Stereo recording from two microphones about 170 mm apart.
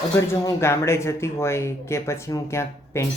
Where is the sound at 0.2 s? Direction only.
15° left (ahead or behind).